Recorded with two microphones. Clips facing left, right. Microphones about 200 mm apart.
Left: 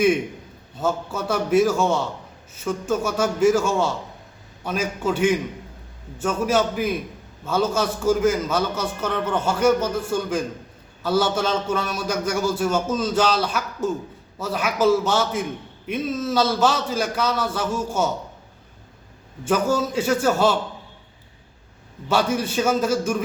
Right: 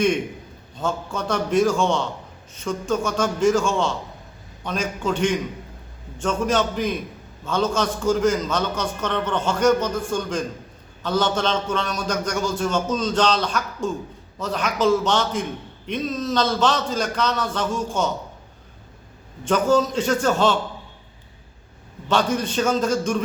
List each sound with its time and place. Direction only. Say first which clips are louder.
0.8 s a man's voice: left 2 dB; 5° left (ahead or behind)
19.5 s a man's voice: right 2 dB; 10° left (ahead or behind)
22.1 s a man's voice: even; 10° left (ahead or behind)